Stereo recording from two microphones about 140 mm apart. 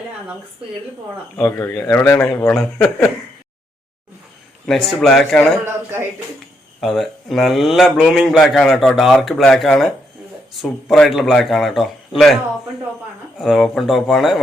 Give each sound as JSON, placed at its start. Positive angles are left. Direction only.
{"t": 1.4, "sound": "speech", "side_deg": 15}
{"t": 4.6, "sound": "a man's voice", "side_deg": 0}
{"t": 5.6, "sound": "speech", "side_deg": -15}
{"t": 6.8, "sound": "a man's voice", "side_deg": 0}
{"t": 13.4, "sound": "a man's voice", "side_deg": 0}